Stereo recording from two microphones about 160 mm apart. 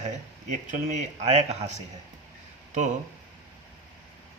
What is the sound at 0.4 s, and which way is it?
Speech, 50° right (ahead or behind).